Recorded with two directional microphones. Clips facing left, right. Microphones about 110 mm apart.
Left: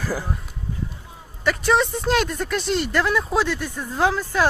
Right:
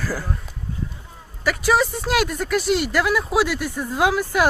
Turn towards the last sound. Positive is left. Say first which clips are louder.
# right 1 dB
turn(degrees=-15)  # may be behind; listen again after turning